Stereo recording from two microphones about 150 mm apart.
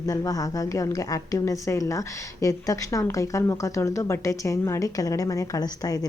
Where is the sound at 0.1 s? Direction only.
25° left (ahead or behind).